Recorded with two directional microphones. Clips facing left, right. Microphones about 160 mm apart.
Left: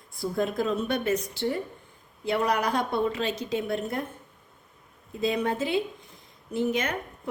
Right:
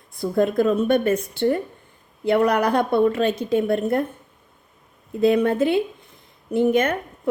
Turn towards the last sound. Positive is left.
turn(degrees=-55)  # may be behind; listen again after turning